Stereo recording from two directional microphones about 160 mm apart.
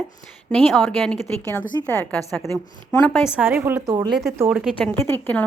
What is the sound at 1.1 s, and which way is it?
A woman's voice, 15° left (ahead or behind).